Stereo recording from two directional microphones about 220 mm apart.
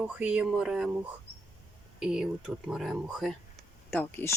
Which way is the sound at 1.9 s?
5° right (ahead or behind).